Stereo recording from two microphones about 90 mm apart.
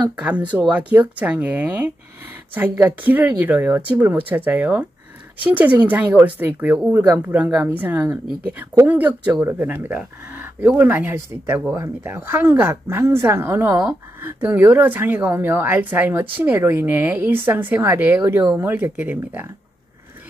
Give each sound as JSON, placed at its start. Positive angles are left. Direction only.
{"t": 0.1, "sound": "a woman's voice", "side_deg": -15}